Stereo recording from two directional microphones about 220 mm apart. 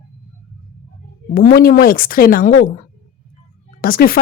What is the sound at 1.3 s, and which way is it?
A woman's voice, 45° left (ahead or behind).